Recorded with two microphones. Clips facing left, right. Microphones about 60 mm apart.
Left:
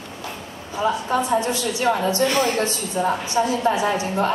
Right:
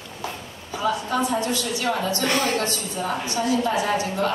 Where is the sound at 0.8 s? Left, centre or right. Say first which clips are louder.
Left 2 dB; left.